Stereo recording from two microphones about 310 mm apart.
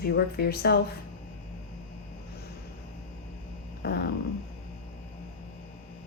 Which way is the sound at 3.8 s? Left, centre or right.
Left.